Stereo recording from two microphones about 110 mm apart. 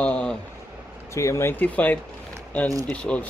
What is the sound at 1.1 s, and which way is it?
Speech, 30° left (ahead or behind).